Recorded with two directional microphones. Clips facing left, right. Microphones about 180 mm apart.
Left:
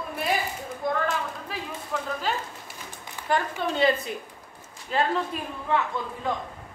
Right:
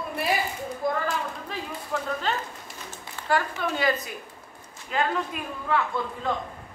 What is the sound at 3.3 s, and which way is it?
A woman's voice, 25° left (ahead or behind).